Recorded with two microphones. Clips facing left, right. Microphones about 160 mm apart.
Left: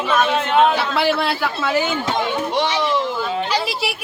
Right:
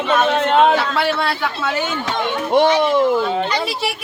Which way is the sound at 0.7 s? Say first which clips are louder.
Even; centre (ahead or behind).